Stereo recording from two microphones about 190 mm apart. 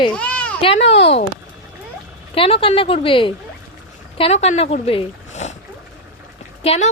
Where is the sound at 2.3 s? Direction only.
30° left (ahead or behind).